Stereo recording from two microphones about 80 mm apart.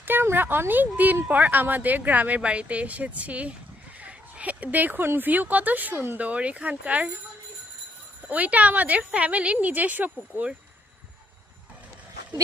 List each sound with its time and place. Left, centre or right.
0.0 s speech: right
8.3 s speech: centre